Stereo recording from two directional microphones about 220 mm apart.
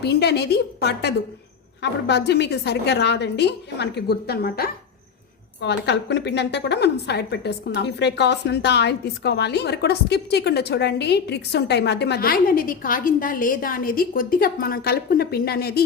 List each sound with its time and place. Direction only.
0.0 s a woman's voice: 50° left (ahead or behind)